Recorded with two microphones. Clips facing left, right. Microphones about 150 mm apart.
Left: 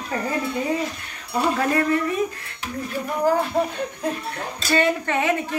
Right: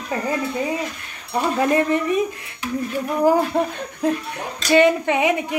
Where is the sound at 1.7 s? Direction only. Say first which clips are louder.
Right 2 dB; 20° right (ahead or behind).